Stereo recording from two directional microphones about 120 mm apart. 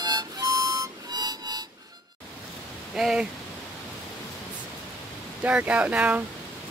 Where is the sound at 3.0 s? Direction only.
5° right (ahead or behind).